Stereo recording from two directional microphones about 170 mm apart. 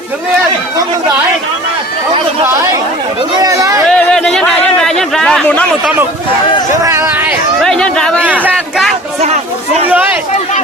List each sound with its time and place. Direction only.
3.3 s speech: 20° right (ahead or behind)
3.8 s a sound: 5° left (ahead or behind)
6.8 s speech: 15° right (ahead or behind)
7.6 s speech: 5° left (ahead or behind)
8.2 s speech: 10° right (ahead or behind)
9.2 s chatter: 40° right (ahead or behind)
9.9 s a sound: 10° right (ahead or behind)